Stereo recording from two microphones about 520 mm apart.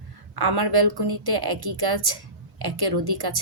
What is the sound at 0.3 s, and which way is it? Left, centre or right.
A woman's voice, right.